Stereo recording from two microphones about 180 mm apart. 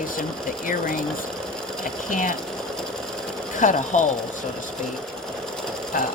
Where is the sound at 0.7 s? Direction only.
50° left (ahead or behind).